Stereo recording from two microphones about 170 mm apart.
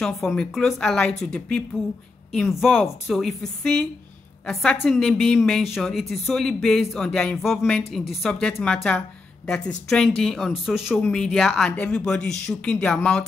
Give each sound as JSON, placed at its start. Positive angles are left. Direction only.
{"t": 0.0, "sound": "speech", "side_deg": 5}